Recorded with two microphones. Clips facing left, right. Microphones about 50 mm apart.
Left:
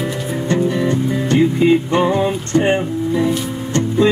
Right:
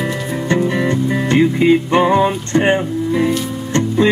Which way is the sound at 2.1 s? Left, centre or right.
Right.